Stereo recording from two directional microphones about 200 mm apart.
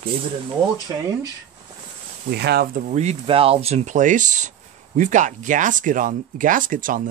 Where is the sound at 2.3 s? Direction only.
55° right (ahead or behind).